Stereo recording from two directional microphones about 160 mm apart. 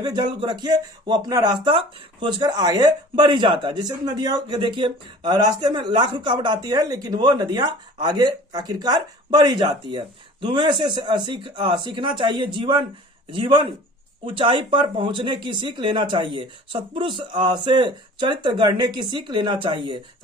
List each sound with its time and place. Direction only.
0.0 s speech: 25° right (ahead or behind)